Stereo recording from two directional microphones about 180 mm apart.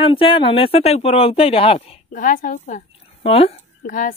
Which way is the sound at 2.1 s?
45° left (ahead or behind).